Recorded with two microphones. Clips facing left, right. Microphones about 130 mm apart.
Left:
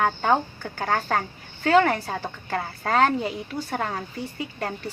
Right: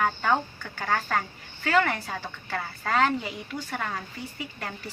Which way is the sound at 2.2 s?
45° left (ahead or behind).